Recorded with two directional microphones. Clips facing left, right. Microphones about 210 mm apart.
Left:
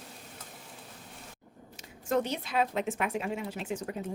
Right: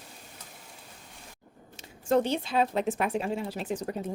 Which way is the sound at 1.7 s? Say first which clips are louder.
Right 4 dB; 30° right (ahead or behind).